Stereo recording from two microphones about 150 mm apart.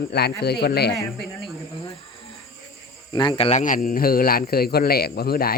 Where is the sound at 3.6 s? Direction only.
65° left (ahead or behind); by 5.5 s 90° left.